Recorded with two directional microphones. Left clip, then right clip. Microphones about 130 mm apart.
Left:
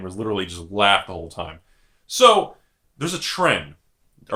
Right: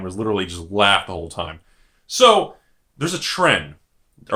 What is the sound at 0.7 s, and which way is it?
Speech, 30° right (ahead or behind).